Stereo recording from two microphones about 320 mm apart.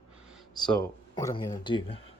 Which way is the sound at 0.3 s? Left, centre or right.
Centre.